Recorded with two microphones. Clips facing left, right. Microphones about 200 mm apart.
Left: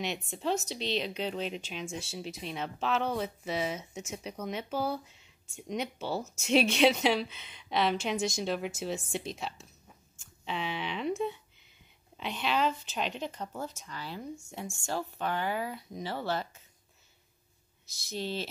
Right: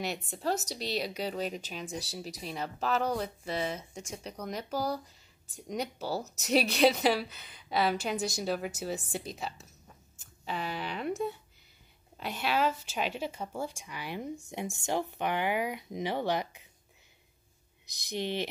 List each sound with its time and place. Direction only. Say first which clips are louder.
0.3 s speech: left 1 dB; 5° right (ahead or behind)
1.9 s speech: right 1 dB; 35° right (ahead or behind)
2.4 s speech: even; centre (ahead or behind)
12.2 s speech: even; 5° right (ahead or behind)
17.8 s speech: right 2 dB; 15° right (ahead or behind)